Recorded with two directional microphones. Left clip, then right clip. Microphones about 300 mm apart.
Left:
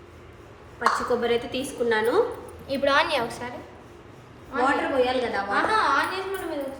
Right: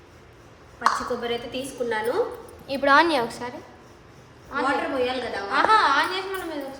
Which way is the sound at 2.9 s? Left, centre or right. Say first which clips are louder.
Right 6 dB; right.